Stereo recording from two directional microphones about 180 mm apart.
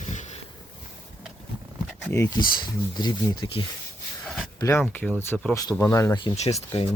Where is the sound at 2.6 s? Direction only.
25° left (ahead or behind).